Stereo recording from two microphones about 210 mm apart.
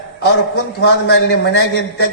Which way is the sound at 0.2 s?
50° left (ahead or behind).